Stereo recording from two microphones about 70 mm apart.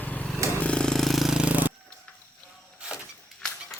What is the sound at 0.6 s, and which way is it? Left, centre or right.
Jackhammer, centre.